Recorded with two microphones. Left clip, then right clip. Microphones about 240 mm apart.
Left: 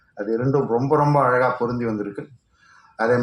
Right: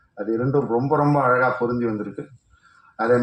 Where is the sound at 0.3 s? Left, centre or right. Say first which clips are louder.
Left 1 dB; left.